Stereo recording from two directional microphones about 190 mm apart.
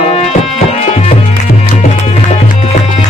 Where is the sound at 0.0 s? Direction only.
30° left (ahead or behind).